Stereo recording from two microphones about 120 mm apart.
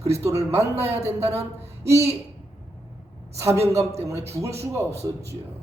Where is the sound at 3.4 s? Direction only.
25° right (ahead or behind).